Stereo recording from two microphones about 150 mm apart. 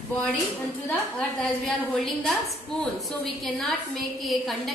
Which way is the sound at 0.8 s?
5° left (ahead or behind).